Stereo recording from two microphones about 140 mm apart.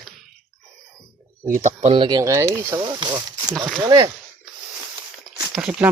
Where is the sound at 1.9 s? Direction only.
35° right (ahead or behind); by 2.8 s 20° right (ahead or behind).